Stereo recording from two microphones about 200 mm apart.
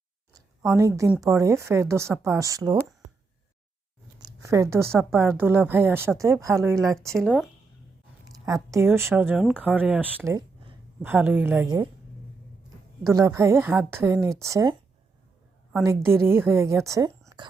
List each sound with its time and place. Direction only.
0.8 s speech: 15° right (ahead or behind)
4.2 s speech: 15° right (ahead or behind)
7.2 s speech: centre (ahead or behind)
8.4 s speech: 15° right (ahead or behind)
13.1 s speech: 15° right (ahead or behind)
15.8 s speech: 15° right (ahead or behind)